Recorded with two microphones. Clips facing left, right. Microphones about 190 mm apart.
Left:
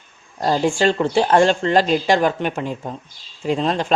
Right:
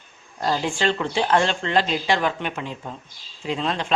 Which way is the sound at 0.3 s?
40° left (ahead or behind).